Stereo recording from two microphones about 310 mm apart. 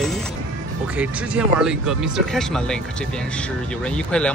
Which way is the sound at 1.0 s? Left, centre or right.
Centre.